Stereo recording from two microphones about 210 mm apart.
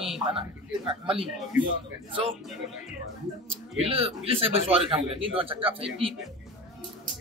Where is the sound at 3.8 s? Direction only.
30° right (ahead or behind).